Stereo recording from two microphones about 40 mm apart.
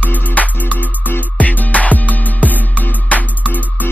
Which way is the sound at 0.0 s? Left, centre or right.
Left.